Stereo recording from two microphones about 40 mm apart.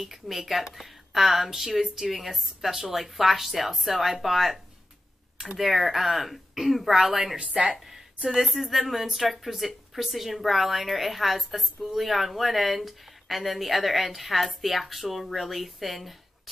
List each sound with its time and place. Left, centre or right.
0.0 s speech: centre
7.3 s a woman's voice: right
8.3 s speech: centre